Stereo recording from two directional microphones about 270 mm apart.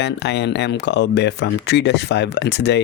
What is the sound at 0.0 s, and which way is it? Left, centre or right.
Speech, left.